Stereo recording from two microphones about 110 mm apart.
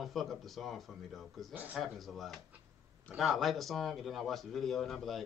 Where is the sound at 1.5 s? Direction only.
15° right (ahead or behind).